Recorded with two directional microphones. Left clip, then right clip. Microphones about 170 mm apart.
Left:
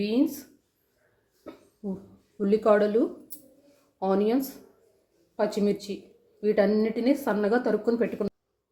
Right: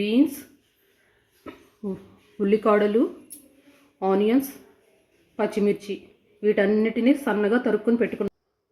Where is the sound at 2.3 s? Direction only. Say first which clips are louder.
Right 2 dB; 50° right (ahead or behind).